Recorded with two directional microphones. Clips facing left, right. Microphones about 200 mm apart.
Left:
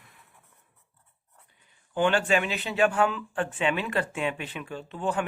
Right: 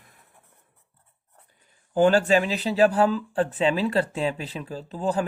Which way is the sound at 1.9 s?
40° right (ahead or behind).